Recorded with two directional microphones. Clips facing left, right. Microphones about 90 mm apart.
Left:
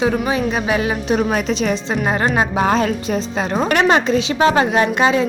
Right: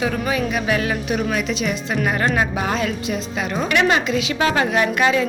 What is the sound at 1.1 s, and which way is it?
A woman's voice, 35° left (ahead or behind).